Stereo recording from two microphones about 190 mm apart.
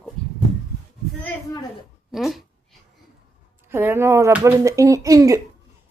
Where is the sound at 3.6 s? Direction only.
10° right (ahead or behind).